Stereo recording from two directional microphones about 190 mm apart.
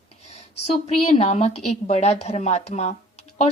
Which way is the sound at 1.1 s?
30° left (ahead or behind).